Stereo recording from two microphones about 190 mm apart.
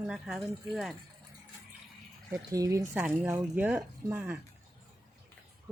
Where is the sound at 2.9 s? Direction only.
5° right (ahead or behind).